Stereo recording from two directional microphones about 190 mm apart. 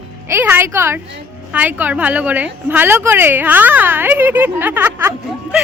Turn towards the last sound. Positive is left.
turn(degrees=-10)  # may be behind; listen again after turning